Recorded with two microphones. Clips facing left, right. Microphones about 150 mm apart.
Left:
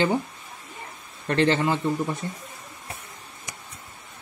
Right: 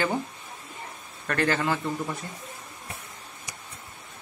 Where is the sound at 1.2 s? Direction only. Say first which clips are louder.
Left 4 dB; 25° left (ahead or behind).